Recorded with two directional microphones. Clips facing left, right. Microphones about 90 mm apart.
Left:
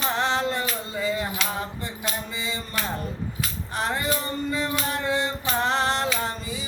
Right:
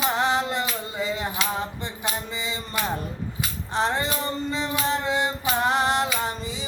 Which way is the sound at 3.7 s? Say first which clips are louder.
Right 2 dB; 25° right (ahead or behind).